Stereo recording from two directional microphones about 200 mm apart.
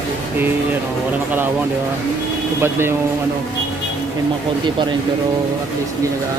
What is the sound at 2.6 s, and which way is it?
Speech, 10° right (ahead or behind).